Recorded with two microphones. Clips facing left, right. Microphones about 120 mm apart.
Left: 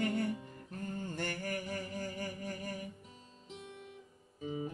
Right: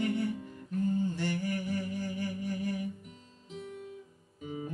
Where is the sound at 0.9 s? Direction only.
50° left (ahead or behind).